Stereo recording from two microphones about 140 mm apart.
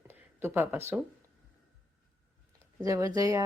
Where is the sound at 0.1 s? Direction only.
15° right (ahead or behind).